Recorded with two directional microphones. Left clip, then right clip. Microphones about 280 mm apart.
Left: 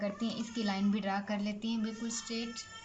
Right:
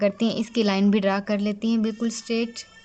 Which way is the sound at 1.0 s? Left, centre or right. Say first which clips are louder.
Right 12 dB; right.